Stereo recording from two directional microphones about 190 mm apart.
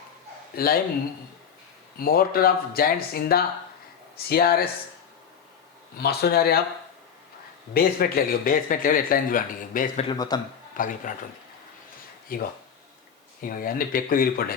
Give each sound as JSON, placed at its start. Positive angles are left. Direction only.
{"t": 0.5, "sound": "speech", "side_deg": 50}
{"t": 2.0, "sound": "speech", "side_deg": 50}
{"t": 6.0, "sound": "speech", "side_deg": 55}
{"t": 7.7, "sound": "speech", "side_deg": 50}
{"t": 10.1, "sound": "speech", "side_deg": 20}
{"t": 10.8, "sound": "speech", "side_deg": 45}
{"t": 13.4, "sound": "speech", "side_deg": 50}